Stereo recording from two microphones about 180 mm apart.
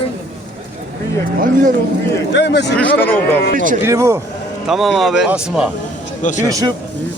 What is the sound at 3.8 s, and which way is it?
Speech, 15° right (ahead or behind).